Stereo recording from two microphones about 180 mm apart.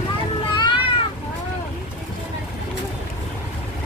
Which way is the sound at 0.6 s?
25° left (ahead or behind).